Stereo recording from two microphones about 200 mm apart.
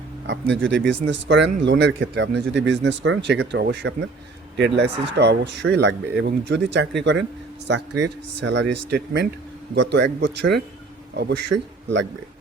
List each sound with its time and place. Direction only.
0.3 s speech: 70° right (ahead or behind)
9.7 s speech: 60° right (ahead or behind)